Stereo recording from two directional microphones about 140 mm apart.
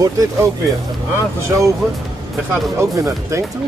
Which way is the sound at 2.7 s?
20° right (ahead or behind).